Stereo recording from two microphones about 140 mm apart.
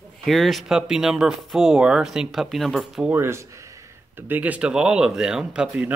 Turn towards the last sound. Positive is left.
turn(degrees=-5)  # may be behind; listen again after turning